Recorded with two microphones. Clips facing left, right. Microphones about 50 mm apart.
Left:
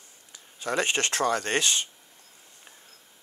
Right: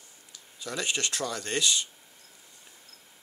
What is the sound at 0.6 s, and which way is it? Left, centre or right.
Speech, left.